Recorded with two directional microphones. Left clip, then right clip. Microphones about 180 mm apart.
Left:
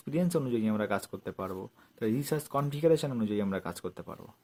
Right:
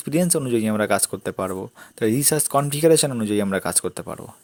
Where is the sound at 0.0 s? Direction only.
45° right (ahead or behind).